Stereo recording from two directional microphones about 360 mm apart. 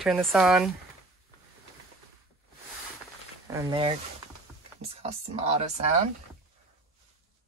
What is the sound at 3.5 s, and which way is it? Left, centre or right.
Speech, centre.